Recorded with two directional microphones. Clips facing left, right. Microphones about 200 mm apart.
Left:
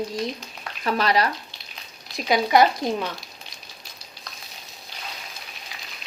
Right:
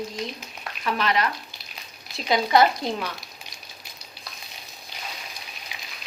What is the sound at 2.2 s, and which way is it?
Speech, 15° left (ahead or behind).